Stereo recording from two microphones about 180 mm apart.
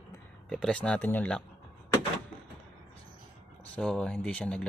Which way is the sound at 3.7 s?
5° left (ahead or behind).